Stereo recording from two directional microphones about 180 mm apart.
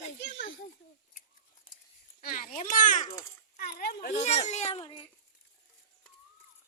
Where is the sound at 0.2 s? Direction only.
90° left.